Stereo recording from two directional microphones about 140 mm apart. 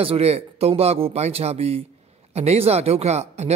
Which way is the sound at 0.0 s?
45° right (ahead or behind).